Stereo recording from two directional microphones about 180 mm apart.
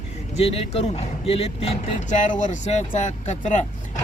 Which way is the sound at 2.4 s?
45° left (ahead or behind).